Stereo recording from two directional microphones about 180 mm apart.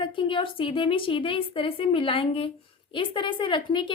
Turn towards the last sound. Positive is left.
turn(degrees=25)  # may be behind; listen again after turning